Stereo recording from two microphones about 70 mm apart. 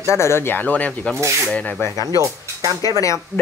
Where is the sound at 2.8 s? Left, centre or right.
Left.